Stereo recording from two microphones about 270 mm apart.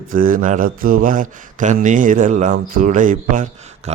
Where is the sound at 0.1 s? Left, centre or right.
Right.